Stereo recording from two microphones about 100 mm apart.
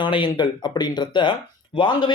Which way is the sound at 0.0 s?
50° left (ahead or behind).